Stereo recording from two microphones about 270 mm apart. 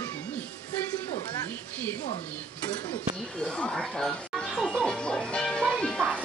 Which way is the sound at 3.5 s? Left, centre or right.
Centre.